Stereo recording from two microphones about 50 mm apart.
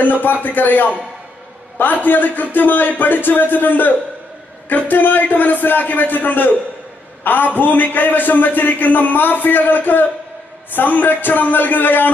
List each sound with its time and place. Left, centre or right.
0.0 s a man's voice: left